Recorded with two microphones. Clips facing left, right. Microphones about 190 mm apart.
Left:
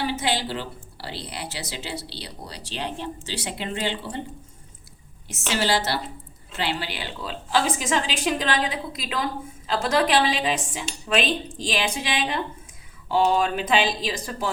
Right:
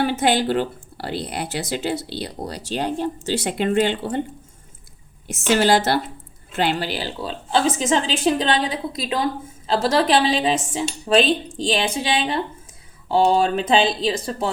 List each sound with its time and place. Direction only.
0.0 s speech: 55° right (ahead or behind)
5.3 s a woman's voice: 50° right (ahead or behind); by 14.5 s 25° right (ahead or behind)